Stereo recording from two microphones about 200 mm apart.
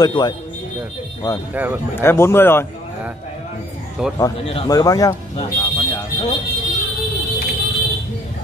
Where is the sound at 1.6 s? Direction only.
10° right (ahead or behind).